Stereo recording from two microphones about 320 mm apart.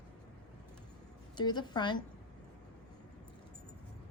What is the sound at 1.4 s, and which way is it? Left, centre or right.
Speech, centre.